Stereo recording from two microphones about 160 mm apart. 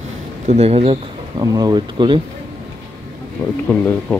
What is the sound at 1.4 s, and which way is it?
Speech, 20° right (ahead or behind).